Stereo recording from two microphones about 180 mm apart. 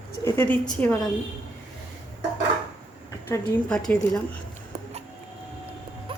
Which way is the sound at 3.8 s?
5° left (ahead or behind).